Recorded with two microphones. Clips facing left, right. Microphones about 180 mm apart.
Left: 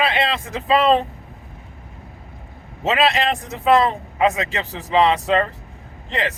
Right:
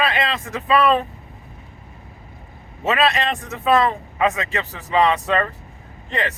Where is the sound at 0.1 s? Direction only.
30° left (ahead or behind).